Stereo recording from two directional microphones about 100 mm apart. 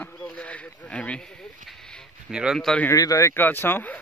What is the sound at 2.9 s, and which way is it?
A man's voice, 35° left (ahead or behind).